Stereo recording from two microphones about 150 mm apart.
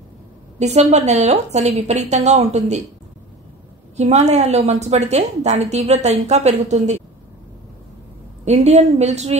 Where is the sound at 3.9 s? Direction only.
50° right (ahead or behind).